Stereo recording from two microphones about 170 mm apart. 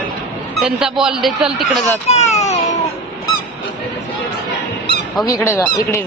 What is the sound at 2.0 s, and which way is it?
Speech, 40° left (ahead or behind).